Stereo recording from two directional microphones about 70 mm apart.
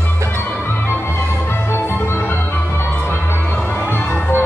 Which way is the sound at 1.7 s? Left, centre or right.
Left.